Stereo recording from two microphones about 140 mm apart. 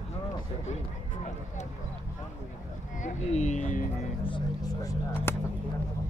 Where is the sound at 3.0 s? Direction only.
55° left (ahead or behind).